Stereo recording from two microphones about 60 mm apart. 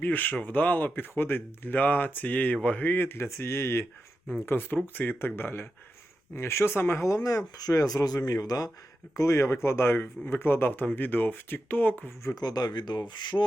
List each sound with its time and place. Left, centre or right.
0.0 s speech: left
3.2 s speech: left
6.3 s speech: left
7.0 s speech: left
9.1 s speech: left
12.2 s speech: left